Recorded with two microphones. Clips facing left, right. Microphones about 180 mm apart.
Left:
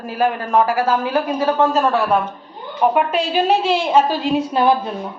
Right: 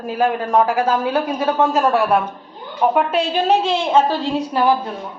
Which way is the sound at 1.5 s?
10° right (ahead or behind).